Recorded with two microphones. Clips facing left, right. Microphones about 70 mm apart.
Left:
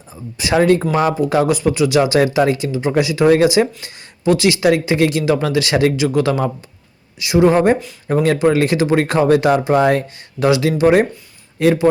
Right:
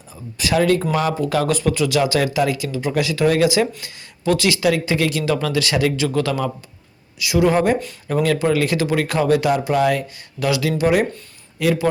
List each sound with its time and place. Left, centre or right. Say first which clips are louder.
0.3 s a man's voice: left 3 dB; left